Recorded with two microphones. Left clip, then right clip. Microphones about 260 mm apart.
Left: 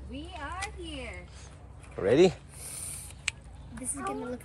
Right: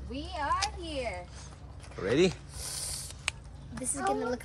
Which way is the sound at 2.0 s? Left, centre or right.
Centre.